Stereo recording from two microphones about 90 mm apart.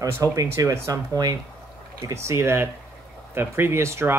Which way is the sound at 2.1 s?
30° right (ahead or behind).